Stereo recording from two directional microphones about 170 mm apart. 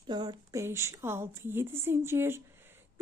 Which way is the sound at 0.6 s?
15° right (ahead or behind).